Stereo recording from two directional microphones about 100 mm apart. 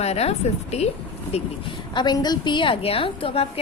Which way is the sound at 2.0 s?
45° left (ahead or behind).